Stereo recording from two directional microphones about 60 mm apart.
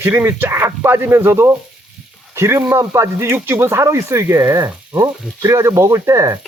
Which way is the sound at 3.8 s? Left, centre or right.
Right.